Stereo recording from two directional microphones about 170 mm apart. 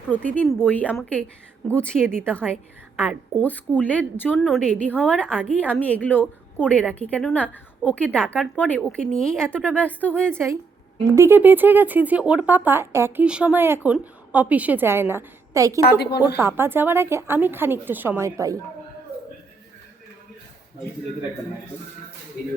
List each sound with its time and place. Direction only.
0.1 s a woman's voice: 10° left (ahead or behind)
3.4 s a woman's voice: 10° left (ahead or behind)
10.3 s speech: 15° right (ahead or behind)
15.9 s speech: 70° left (ahead or behind)
16.4 s speech: 15° right (ahead or behind)